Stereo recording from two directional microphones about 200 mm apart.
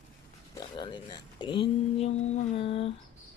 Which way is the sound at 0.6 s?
20° left (ahead or behind).